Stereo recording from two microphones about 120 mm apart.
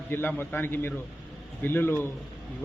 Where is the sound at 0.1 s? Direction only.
15° left (ahead or behind).